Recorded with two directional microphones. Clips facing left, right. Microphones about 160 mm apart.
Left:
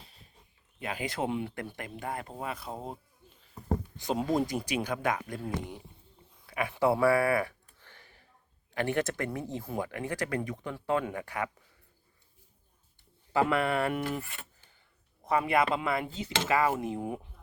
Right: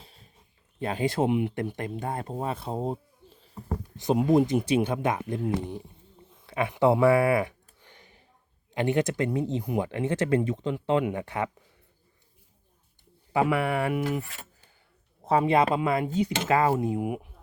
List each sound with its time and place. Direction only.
0.8 s speech: 30° right (ahead or behind)
4.0 s speech: 20° right (ahead or behind)
6.4 s a sound: 25° right (ahead or behind)
8.7 s speech: 20° right (ahead or behind)
13.3 s speech: 10° right (ahead or behind)
14.0 s speech: centre (ahead or behind)
15.2 s speech: 30° right (ahead or behind)